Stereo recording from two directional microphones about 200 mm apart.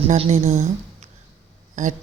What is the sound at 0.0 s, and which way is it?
Speech, 30° right (ahead or behind).